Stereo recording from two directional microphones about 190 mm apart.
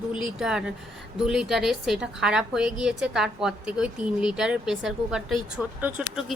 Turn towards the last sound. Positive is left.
turn(degrees=-5)  # may be behind; listen again after turning